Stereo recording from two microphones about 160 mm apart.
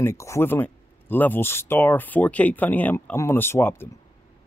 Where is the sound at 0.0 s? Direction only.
15° left (ahead or behind).